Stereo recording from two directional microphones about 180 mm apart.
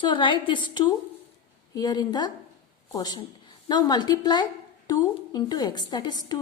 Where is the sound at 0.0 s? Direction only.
25° left (ahead or behind).